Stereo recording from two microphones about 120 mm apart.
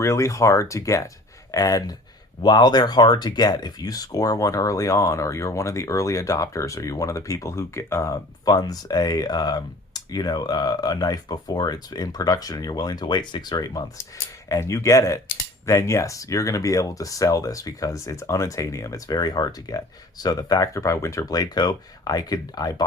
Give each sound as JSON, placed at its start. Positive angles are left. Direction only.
{"t": 0.0, "sound": "speech", "side_deg": 25}